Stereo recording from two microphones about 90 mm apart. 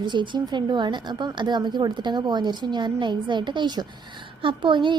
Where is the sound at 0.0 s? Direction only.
60° right (ahead or behind).